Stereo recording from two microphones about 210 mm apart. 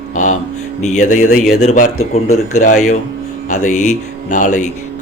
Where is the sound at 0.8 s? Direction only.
35° left (ahead or behind).